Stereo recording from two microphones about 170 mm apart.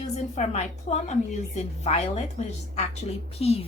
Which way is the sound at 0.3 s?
40° left (ahead or behind).